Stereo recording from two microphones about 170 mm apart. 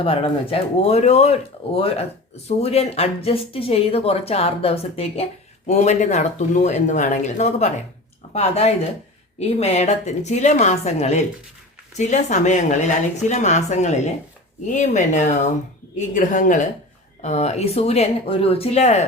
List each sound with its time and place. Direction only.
0.0 s a woman's voice: 35° left (ahead or behind)